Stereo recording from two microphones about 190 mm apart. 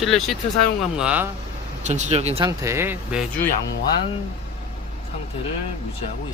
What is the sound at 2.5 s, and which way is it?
Speech, 15° right (ahead or behind).